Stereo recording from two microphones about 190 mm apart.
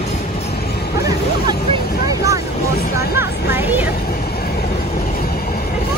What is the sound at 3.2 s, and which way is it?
Vehicle, 60° left (ahead or behind).